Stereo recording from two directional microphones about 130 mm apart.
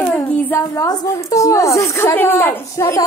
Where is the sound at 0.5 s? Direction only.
20° left (ahead or behind).